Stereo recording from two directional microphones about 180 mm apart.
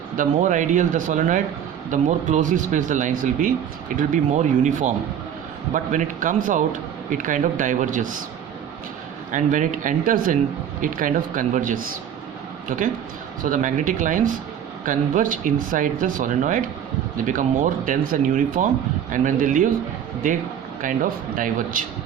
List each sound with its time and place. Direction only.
0.2 s speech: 45° right (ahead or behind)
9.3 s speech: 45° right (ahead or behind)
20.8 s speech: 50° right (ahead or behind)